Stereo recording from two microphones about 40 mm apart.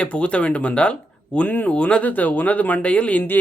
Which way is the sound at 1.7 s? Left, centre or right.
Left.